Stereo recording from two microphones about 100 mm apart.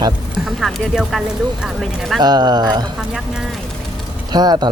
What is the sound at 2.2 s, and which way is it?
Speech, 45° right (ahead or behind).